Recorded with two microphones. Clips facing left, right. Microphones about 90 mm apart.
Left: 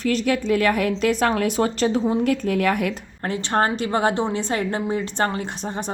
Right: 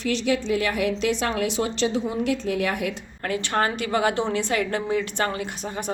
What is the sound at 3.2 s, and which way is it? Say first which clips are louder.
A woman's voice: left 2 dB; 30° left (ahead or behind).